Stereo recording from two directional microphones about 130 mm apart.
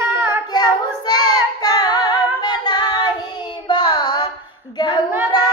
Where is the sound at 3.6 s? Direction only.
30° left (ahead or behind).